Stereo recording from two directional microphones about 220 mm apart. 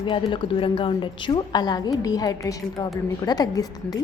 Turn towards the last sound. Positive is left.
turn(degrees=15)  # may be behind; listen again after turning